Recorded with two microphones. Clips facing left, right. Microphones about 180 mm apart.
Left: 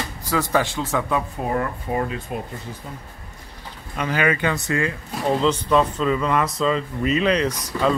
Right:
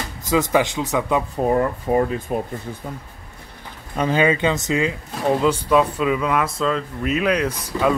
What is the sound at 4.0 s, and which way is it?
Speech, 25° right (ahead or behind).